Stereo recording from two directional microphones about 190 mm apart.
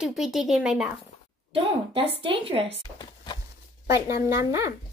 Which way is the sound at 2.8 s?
20° left (ahead or behind).